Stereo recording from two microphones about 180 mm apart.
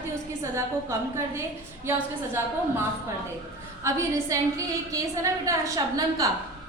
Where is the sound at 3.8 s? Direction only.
15° right (ahead or behind).